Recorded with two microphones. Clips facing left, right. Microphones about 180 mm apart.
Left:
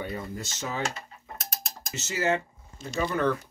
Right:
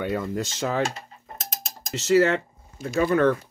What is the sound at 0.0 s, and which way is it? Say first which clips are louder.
Speech: right 8 dB; 90° right.